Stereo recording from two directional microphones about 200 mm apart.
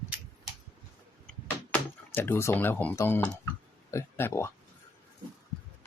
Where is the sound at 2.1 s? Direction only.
10° left (ahead or behind).